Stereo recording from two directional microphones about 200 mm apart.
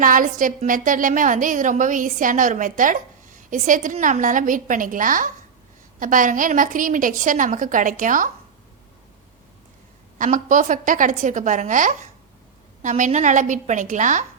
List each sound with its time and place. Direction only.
0.0 s a woman's voice: 40° right (ahead or behind)
10.2 s a woman's voice: 40° right (ahead or behind)